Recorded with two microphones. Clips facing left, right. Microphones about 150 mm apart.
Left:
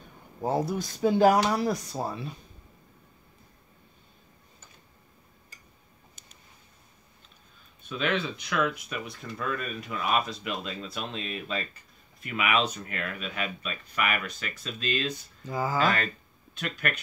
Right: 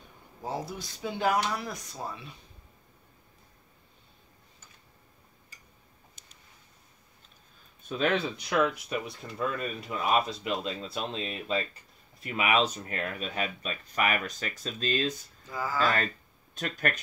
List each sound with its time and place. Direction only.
0.4 s speech: 50° left (ahead or behind); by 2.3 s 35° left (ahead or behind)
7.9 s speech: 40° right (ahead or behind)
15.5 s speech: 20° left (ahead or behind)
16.5 s speech: 40° right (ahead or behind)